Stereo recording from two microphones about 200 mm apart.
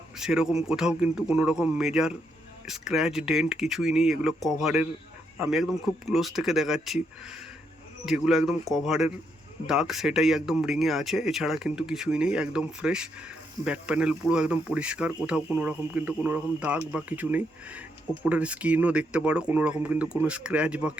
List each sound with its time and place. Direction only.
0.2 s speech: 5° right (ahead or behind)